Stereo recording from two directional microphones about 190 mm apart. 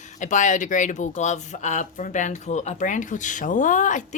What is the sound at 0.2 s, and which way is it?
A woman's voice, 40° left (ahead or behind).